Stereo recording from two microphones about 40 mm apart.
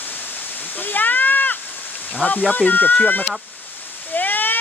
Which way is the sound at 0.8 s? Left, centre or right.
Left.